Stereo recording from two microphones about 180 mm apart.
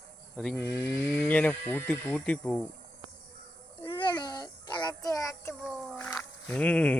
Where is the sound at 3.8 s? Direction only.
25° left (ahead or behind).